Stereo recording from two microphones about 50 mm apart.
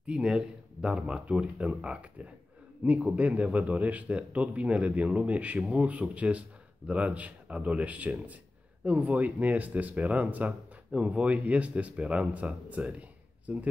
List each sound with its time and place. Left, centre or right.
0.0 s speech: centre